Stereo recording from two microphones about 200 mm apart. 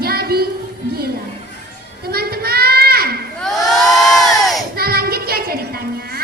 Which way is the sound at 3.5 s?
20° left (ahead or behind).